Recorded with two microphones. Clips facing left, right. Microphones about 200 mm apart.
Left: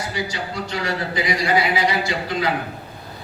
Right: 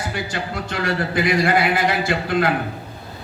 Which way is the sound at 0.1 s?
55° right (ahead or behind).